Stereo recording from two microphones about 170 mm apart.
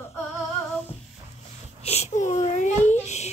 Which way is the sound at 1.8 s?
40° left (ahead or behind).